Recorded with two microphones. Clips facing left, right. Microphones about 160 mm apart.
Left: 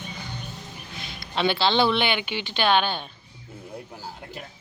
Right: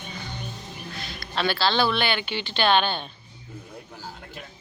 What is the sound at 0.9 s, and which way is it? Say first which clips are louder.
Speech: left 1 dB; 20° left (ahead or behind).